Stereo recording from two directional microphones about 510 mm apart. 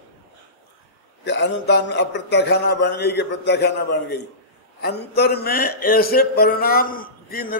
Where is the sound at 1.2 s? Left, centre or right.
Left.